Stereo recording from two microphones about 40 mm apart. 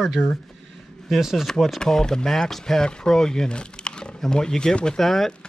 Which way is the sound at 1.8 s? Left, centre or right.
Centre.